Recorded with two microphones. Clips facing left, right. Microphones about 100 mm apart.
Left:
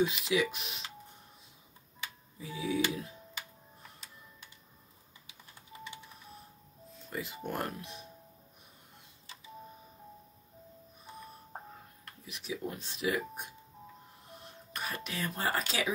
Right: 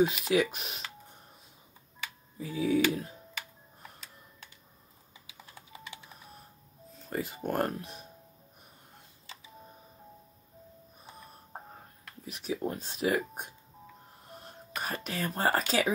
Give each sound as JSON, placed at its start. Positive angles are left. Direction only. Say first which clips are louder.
{"t": 0.0, "sound": "speech", "louder": "right 4 dB", "side_deg": -45}
{"t": 2.3, "sound": "speech", "louder": "right 6 dB", "side_deg": -45}
{"t": 7.0, "sound": "speech", "louder": "right 5 dB", "side_deg": -45}
{"t": 12.3, "sound": "speech", "louder": "right 5 dB", "side_deg": -40}